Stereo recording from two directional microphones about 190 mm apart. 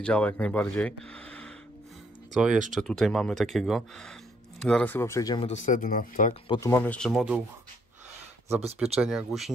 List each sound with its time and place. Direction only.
0.0 s speech: 5° left (ahead or behind)
2.3 s speech: 5° right (ahead or behind); by 5.5 s 20° left (ahead or behind)
5.5 s speech: 40° left (ahead or behind)
6.4 s speech: 25° left (ahead or behind)
6.7 s speech: 10° left (ahead or behind)
9.0 s speech: centre (ahead or behind)